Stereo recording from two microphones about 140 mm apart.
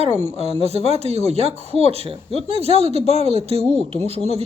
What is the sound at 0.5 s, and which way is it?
Speech, 50° right (ahead or behind).